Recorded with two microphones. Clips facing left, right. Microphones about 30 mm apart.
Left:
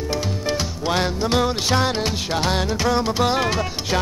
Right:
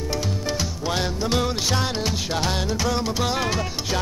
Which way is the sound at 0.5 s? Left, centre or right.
Centre.